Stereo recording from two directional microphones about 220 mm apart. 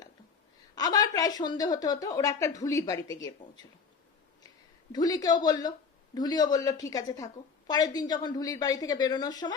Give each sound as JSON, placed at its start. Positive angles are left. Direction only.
{"t": 0.8, "sound": "a woman's voice", "side_deg": 15}
{"t": 4.4, "sound": "a woman's voice", "side_deg": 15}